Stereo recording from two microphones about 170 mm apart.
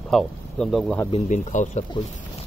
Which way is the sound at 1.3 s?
45° left (ahead or behind).